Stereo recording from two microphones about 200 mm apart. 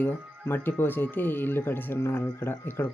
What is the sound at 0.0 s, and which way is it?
Speech, 10° left (ahead or behind).